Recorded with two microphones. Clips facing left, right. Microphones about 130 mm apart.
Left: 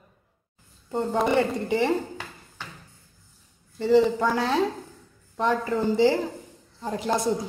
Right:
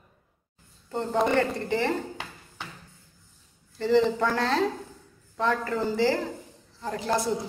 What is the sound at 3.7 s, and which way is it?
A woman's voice, 5° left (ahead or behind).